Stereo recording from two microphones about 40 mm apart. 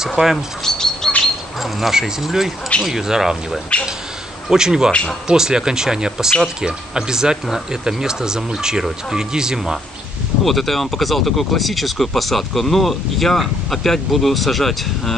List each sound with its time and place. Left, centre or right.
0.0 s speech: centre
0.7 s bird: centre
1.6 s speech: centre
3.7 s speech: left
4.5 s speech: centre
10.4 s speech: centre